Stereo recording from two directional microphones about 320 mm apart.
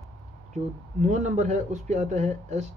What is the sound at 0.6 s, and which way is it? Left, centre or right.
Speech, right.